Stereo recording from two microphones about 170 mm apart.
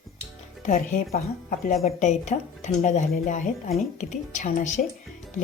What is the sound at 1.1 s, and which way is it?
Speech, 50° left (ahead or behind).